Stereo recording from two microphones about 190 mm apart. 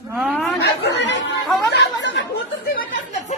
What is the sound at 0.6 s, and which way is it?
Chatter, 65° left (ahead or behind).